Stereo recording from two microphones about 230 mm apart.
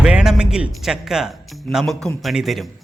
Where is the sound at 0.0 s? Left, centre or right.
Centre.